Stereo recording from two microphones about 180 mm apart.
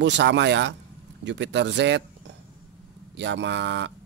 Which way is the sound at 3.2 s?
80° right.